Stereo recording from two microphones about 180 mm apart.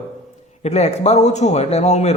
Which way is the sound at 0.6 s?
35° left (ahead or behind).